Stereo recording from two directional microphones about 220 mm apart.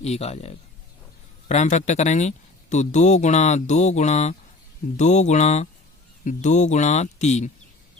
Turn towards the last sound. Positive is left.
turn(degrees=30)  # may be behind; listen again after turning